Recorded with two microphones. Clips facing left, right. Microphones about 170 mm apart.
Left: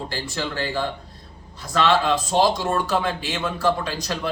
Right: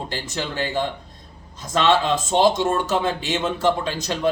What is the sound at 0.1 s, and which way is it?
Speech, 20° right (ahead or behind).